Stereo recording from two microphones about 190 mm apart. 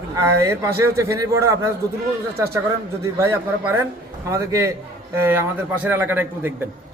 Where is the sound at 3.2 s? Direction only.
15° right (ahead or behind).